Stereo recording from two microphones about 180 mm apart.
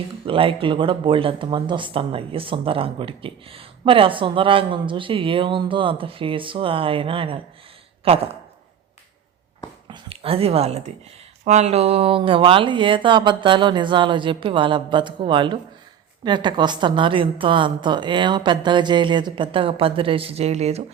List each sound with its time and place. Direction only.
0.3 s speech: 30° right (ahead or behind)
9.8 s speech: 30° right (ahead or behind)